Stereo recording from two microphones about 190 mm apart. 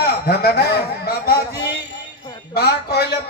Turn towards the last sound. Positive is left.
turn(degrees=60)  # may be behind; listen again after turning